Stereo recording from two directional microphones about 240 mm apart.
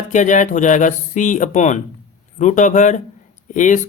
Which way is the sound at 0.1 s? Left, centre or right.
Left.